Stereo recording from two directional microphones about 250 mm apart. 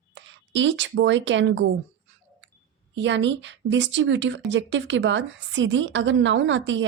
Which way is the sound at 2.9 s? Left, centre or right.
Right.